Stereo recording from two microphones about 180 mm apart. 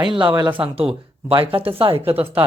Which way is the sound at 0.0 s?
25° right (ahead or behind).